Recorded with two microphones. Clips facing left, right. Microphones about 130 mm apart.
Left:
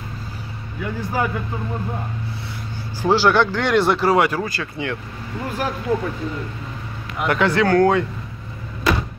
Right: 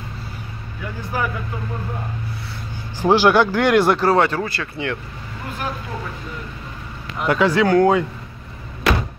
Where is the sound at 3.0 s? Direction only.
15° right (ahead or behind).